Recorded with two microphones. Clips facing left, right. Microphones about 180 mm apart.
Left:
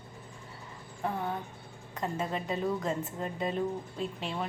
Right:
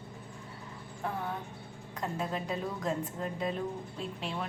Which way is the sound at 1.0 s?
Centre (ahead or behind).